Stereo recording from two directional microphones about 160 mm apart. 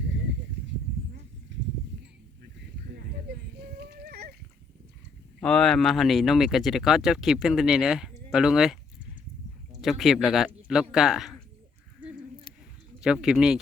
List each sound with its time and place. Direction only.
2.9 s a sound: 75° right (ahead or behind)
5.4 s speech: 5° left (ahead or behind)
9.8 s speech: centre (ahead or behind)
13.0 s speech: 5° right (ahead or behind)